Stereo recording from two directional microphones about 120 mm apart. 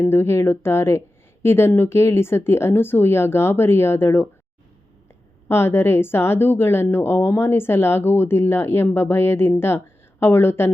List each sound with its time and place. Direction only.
0.0 s a woman's voice: 20° left (ahead or behind)
5.5 s a woman's voice: 20° left (ahead or behind)